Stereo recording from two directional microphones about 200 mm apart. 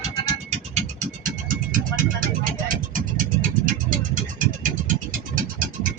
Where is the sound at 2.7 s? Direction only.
45° right (ahead or behind).